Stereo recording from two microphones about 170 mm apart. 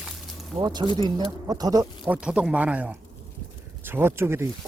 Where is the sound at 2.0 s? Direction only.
5° right (ahead or behind).